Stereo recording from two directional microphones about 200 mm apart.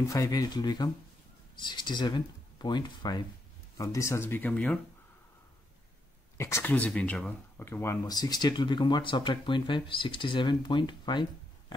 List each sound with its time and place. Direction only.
0.1 s speech: 15° left (ahead or behind)
6.3 s speech: 15° left (ahead or behind)